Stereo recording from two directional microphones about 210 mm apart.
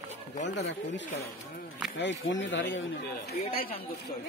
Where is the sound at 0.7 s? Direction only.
60° left (ahead or behind).